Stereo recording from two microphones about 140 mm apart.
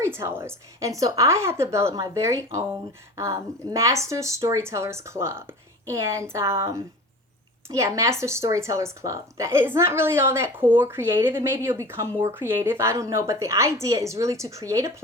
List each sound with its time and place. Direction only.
0.0 s speech: 20° right (ahead or behind)